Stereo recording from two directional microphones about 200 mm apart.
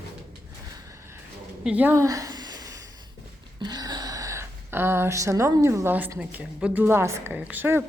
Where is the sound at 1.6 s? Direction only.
5° right (ahead or behind).